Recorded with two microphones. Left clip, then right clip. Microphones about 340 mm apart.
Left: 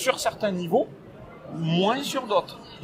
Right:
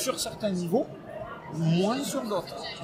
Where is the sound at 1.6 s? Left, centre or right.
Left.